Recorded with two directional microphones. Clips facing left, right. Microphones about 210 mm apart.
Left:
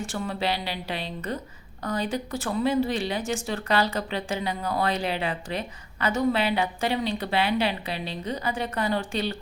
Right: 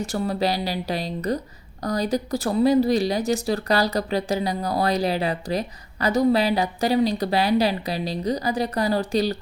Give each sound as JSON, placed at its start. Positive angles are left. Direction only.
{"t": 0.0, "sound": "speech", "side_deg": -40}